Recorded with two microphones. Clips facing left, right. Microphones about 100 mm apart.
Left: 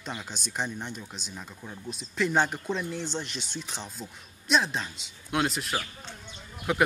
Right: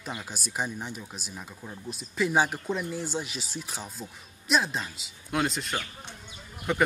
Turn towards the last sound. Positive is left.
turn(degrees=5)  # may be behind; listen again after turning